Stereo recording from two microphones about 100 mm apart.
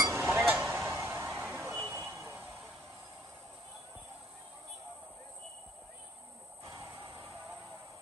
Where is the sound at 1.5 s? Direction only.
20° right (ahead or behind).